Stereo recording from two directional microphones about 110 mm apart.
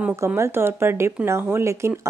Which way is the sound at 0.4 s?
20° right (ahead or behind).